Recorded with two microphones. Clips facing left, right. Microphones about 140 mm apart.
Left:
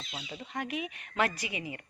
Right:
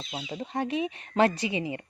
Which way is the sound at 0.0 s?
30° right (ahead or behind).